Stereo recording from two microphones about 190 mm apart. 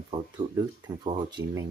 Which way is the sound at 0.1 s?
25° right (ahead or behind).